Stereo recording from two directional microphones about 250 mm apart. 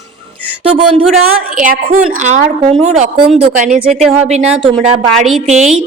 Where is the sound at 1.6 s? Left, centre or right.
Right.